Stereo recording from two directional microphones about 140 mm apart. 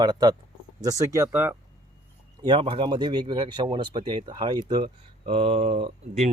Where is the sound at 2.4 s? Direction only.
35° right (ahead or behind).